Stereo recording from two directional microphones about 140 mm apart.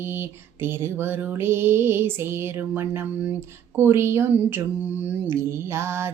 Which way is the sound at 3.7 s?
15° right (ahead or behind).